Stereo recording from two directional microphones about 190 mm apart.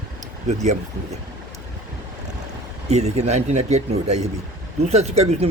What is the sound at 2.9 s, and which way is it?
Speech, 35° right (ahead or behind).